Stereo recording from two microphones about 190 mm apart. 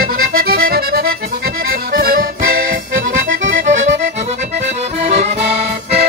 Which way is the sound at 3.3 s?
80° right.